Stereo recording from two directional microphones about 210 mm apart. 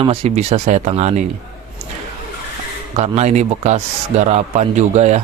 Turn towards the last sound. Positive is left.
turn(degrees=-35)  # may be behind; listen again after turning